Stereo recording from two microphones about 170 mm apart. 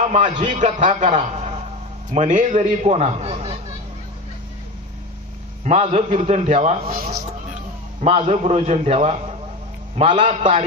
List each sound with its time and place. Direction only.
0.1 s a man's voice: 45° right (ahead or behind)
5.7 s a man's voice: 40° right (ahead or behind)
6.9 s speech: 60° right (ahead or behind)
8.0 s a man's voice: 40° right (ahead or behind)